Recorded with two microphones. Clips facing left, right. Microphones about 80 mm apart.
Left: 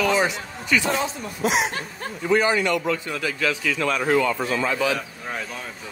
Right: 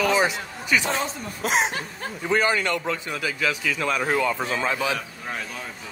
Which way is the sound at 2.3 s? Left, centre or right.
Right.